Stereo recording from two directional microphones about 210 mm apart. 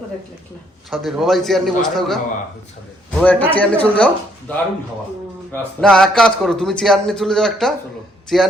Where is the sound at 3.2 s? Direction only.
5° left (ahead or behind).